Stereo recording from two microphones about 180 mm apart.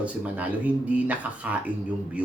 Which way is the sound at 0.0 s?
10° right (ahead or behind).